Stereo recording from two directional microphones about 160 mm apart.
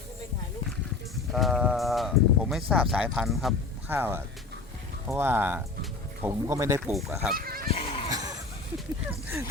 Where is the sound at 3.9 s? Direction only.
15° right (ahead or behind).